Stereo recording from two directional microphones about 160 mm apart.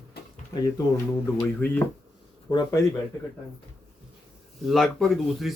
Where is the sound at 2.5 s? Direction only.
25° left (ahead or behind).